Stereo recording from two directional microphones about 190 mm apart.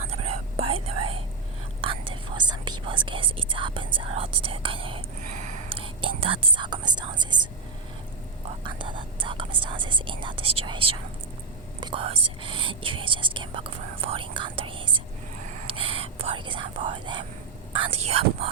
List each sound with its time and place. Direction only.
0.1 s whispering: 30° right (ahead or behind)
5.6 s speech: 30° right (ahead or behind)
8.6 s speech: 25° right (ahead or behind)